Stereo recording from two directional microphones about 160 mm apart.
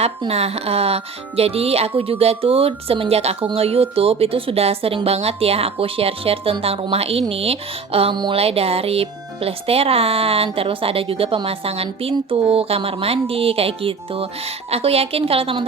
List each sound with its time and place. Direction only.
0.2 s speech: 40° right (ahead or behind)